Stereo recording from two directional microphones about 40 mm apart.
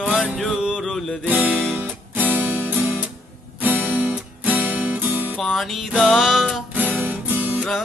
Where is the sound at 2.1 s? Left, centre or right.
Right.